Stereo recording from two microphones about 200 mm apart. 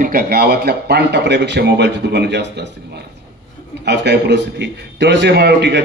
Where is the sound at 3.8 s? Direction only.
60° right (ahead or behind).